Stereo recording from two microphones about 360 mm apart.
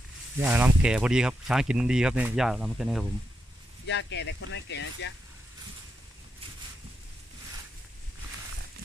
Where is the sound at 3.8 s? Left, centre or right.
Left.